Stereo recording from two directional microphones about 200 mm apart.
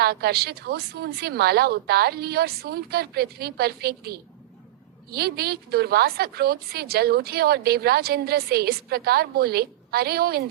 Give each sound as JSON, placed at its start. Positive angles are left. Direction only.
{"t": 0.0, "sound": "a woman's voice", "side_deg": -55}